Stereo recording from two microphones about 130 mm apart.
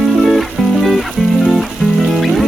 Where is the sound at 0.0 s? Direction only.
Centre (ahead or behind).